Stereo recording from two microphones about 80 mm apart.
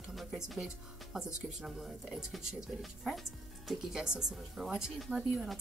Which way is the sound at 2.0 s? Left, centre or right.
Centre.